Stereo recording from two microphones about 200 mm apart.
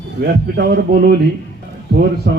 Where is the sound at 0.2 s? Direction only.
50° right (ahead or behind).